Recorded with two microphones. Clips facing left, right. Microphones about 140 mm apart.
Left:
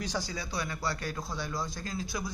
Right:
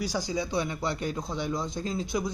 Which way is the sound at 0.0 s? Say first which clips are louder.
Right 6 dB; 15° right (ahead or behind).